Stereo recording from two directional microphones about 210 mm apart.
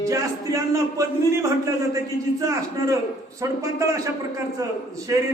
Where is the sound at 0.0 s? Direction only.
15° right (ahead or behind).